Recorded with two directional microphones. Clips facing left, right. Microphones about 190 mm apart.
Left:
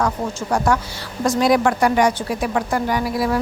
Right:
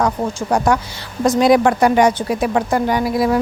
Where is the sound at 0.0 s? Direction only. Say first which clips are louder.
Right 3 dB; 15° right (ahead or behind).